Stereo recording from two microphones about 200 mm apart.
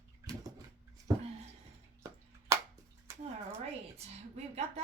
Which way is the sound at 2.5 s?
15° right (ahead or behind).